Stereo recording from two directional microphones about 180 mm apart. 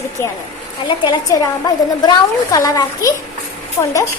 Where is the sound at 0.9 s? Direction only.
25° left (ahead or behind).